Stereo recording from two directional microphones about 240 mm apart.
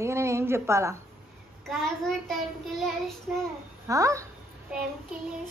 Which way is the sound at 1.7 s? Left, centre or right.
Centre.